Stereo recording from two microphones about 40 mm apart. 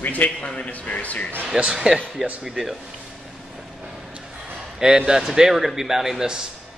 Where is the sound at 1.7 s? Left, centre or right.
Centre.